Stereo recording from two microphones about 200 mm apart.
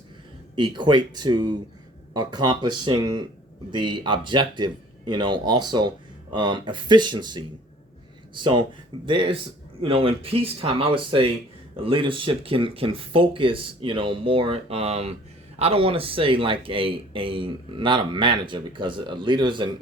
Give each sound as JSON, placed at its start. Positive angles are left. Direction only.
{"t": 0.6, "sound": "speech", "side_deg": -25}